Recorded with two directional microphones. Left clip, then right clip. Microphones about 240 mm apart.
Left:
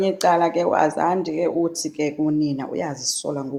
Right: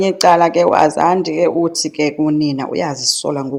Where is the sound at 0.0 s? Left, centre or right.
Right.